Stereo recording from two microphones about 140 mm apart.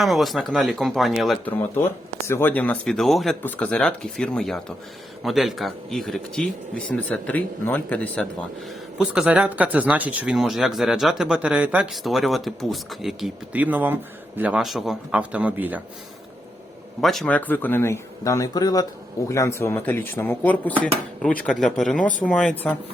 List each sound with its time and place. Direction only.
0.0 s speech: centre (ahead or behind)
1.5 s speech: 20° left (ahead or behind)
9.0 s speech: 5° right (ahead or behind)
17.0 s speech: centre (ahead or behind)